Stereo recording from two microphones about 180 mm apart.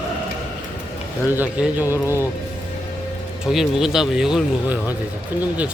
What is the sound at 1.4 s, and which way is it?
Speech, 5° right (ahead or behind).